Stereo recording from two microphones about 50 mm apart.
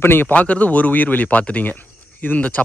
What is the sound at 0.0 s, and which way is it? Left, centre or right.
Speech, left.